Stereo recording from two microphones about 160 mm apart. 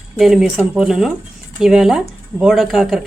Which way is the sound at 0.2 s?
Centre (ahead or behind).